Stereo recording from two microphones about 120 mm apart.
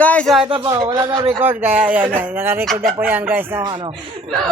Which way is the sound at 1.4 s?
15° right (ahead or behind).